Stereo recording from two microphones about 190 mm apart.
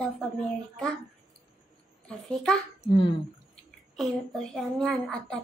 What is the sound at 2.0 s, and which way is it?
Speech, 5° left (ahead or behind).